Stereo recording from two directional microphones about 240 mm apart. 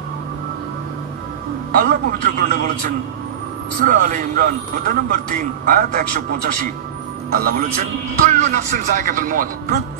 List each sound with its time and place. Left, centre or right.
1.7 s a man's voice: right